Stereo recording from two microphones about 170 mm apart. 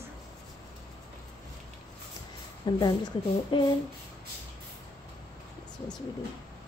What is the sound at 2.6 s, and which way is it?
Speech, 25° left (ahead or behind).